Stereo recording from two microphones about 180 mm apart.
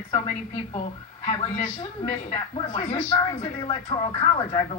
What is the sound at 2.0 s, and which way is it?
Speech, 30° left (ahead or behind).